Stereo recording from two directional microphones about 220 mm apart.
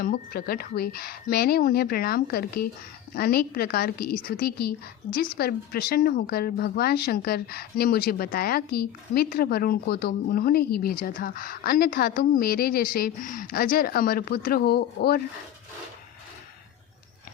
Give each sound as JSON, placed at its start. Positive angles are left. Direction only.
{"t": 0.0, "sound": "a woman's voice", "side_deg": 45}